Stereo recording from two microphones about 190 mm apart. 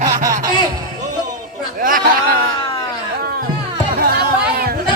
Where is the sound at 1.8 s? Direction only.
45° right (ahead or behind).